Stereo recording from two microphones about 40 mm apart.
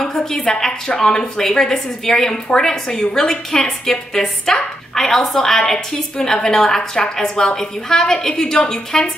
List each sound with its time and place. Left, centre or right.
0.0 s a woman's voice: centre